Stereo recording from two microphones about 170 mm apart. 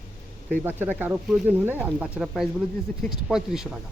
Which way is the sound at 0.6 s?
10° right (ahead or behind).